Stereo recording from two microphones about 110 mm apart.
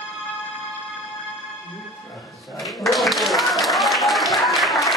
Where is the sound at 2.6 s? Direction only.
Centre (ahead or behind).